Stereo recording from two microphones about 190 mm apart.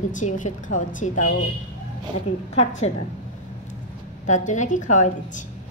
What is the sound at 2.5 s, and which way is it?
Speech, 35° left (ahead or behind).